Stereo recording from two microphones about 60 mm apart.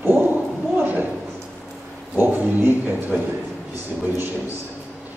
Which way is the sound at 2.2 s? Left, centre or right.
Right.